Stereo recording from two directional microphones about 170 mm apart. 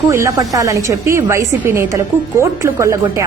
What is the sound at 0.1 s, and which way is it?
A woman's voice, 15° right (ahead or behind).